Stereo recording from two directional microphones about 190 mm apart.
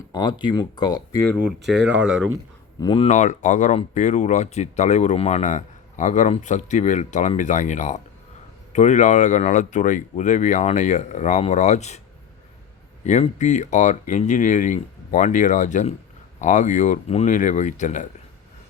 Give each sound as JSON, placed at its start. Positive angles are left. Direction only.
{"t": 0.1, "sound": "speech", "side_deg": 25}
{"t": 1.2, "sound": "speech", "side_deg": 10}
{"t": 2.0, "sound": "speech", "side_deg": -5}
{"t": 2.8, "sound": "speech", "side_deg": 25}
{"t": 3.1, "sound": "speech", "side_deg": 40}
{"t": 13.1, "sound": "speech", "side_deg": 40}